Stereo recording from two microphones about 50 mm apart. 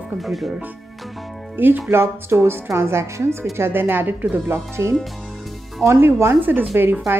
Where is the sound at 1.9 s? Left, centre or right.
Right.